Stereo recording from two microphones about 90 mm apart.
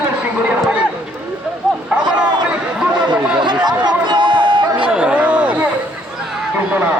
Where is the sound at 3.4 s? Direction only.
50° right (ahead or behind).